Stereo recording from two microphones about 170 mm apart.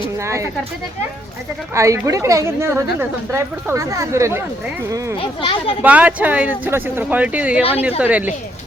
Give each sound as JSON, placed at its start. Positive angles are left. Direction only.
{"t": 0.2, "sound": "speech", "side_deg": -15}
{"t": 1.7, "sound": "a woman's voice", "side_deg": -20}
{"t": 5.4, "sound": "speech", "side_deg": 30}
{"t": 5.8, "sound": "a woman's voice", "side_deg": -10}